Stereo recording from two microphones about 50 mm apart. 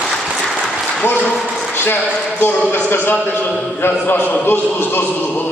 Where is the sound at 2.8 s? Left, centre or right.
Left.